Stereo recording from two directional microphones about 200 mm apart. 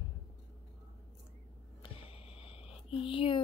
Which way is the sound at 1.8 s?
25° left (ahead or behind).